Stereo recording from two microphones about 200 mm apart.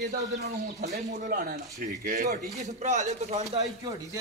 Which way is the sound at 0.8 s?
55° right (ahead or behind).